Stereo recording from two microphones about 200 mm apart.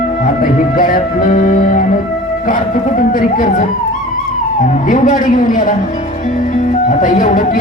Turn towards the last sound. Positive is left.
turn(degrees=40)  # may be behind; listen again after turning